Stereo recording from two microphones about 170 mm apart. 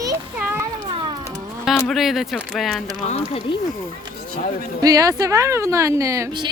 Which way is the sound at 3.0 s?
40° left (ahead or behind).